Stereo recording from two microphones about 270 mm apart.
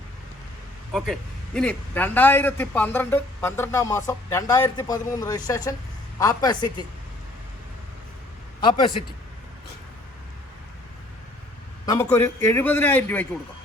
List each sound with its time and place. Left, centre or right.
0.9 s a man's voice: centre
8.6 s a man's voice: centre
11.9 s a man's voice: centre